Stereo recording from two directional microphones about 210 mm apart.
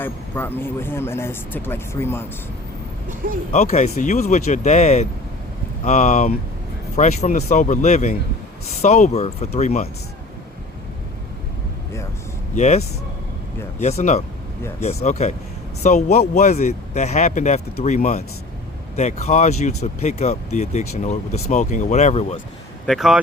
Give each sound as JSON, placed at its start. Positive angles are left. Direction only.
{"t": 0.0, "sound": "speech", "side_deg": 10}
{"t": 3.5, "sound": "speech", "side_deg": 30}
{"t": 12.5, "sound": "speech", "side_deg": 30}
{"t": 22.9, "sound": "speech", "side_deg": 0}